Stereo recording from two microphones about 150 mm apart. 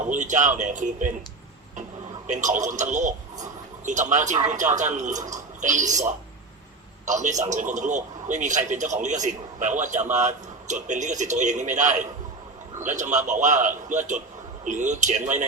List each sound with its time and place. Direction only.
0.1 s speech: 55° right (ahead or behind)
2.2 s a man's voice: 55° right (ahead or behind)